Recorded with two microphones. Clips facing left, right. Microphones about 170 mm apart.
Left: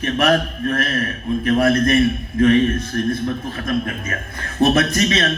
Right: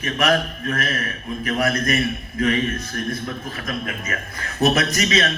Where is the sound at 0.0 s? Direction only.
30° left (ahead or behind).